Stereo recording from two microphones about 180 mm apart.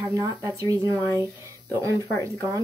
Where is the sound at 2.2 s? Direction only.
15° right (ahead or behind).